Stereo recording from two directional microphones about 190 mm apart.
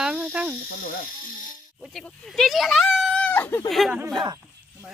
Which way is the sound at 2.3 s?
Centre (ahead or behind).